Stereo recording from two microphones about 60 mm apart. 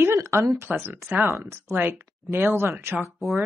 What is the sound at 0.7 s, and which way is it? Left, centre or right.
Speech, right.